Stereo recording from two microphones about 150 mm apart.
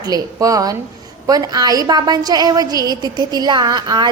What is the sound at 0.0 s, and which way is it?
A woman's voice, 25° right (ahead or behind).